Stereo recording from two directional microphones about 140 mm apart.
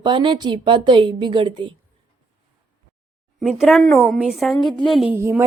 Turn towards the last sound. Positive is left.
turn(degrees=-15)  # may be behind; listen again after turning